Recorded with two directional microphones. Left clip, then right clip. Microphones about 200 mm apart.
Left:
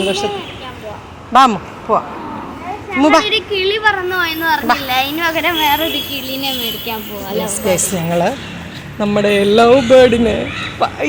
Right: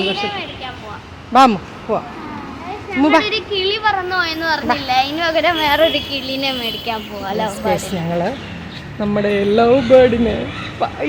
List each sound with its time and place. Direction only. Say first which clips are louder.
1.3 s speech: left 1 dB; 20° right (ahead or behind)
2.9 s a woman's voice: left 3 dB; centre (ahead or behind); by 6.5 s 15° right (ahead or behind)
6.8 s a woman's voice: right 1 dB; 5° right (ahead or behind)